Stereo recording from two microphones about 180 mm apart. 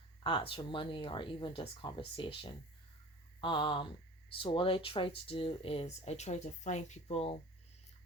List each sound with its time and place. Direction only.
0.2 s speech: 30° left (ahead or behind)